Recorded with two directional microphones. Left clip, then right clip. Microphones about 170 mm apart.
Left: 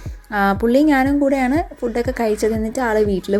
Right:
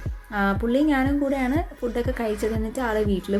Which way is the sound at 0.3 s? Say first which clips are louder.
Left 7 dB; 40° left (ahead or behind).